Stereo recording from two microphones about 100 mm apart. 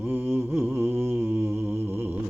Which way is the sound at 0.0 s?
20° right (ahead or behind).